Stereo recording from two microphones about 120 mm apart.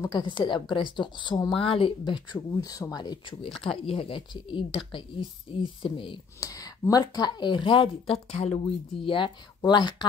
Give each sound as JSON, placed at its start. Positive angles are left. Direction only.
{"t": 0.1, "sound": "speech", "side_deg": 40}
{"t": 1.5, "sound": "speech", "side_deg": 50}
{"t": 2.3, "sound": "speech", "side_deg": 25}
{"t": 6.4, "sound": "speech", "side_deg": 30}